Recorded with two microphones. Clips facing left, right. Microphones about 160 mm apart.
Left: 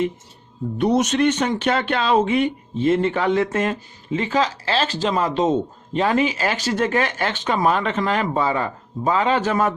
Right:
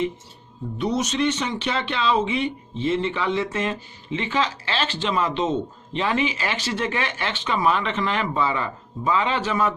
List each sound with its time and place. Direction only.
0.8 s speech: 55° left (ahead or behind)